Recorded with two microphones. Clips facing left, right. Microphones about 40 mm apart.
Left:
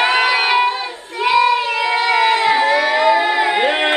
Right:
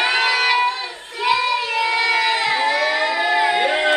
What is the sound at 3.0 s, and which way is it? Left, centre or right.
Music, left.